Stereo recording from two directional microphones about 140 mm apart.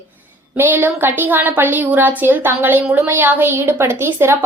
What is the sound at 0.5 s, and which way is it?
A woman's voice, 15° right (ahead or behind).